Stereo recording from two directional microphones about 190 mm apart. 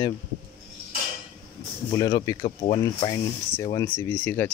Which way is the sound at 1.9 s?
20° left (ahead or behind).